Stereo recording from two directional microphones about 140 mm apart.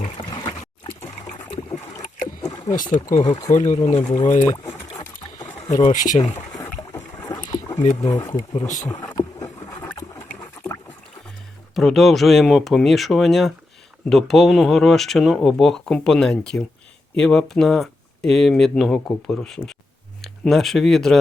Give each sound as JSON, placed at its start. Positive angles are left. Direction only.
{"t": 0.0, "sound": "boat", "side_deg": 35}
{"t": 0.9, "sound": "trickle", "side_deg": 30}
{"t": 2.2, "sound": "wild animals", "side_deg": 30}
{"t": 3.5, "sound": "speech", "side_deg": 60}
{"t": 4.4, "sound": "speech", "side_deg": 20}
{"t": 5.9, "sound": "speech", "side_deg": 65}
{"t": 6.6, "sound": "boat", "side_deg": 15}
{"t": 7.3, "sound": "boat", "side_deg": 25}
{"t": 8.0, "sound": "speech", "side_deg": 25}
{"t": 8.6, "sound": "speech", "side_deg": 60}
{"t": 8.9, "sound": "boat", "side_deg": 25}
{"t": 11.7, "sound": "speech", "side_deg": 0}